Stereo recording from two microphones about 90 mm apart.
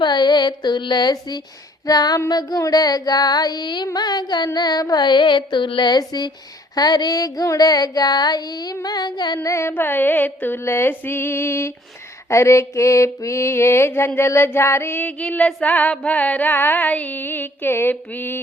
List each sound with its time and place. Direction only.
0.0 s a sound: 55° left (ahead or behind)
1.9 s child singing: 45° left (ahead or behind)
9.5 s mantra: 30° left (ahead or behind)